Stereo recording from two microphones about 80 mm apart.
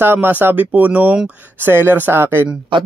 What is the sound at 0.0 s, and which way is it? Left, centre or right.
Speech, right.